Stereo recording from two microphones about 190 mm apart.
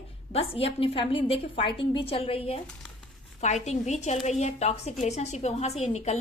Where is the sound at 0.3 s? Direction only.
30° left (ahead or behind).